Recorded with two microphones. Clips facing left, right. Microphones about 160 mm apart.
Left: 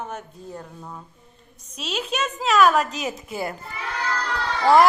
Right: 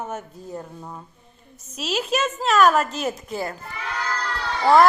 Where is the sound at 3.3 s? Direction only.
10° left (ahead or behind).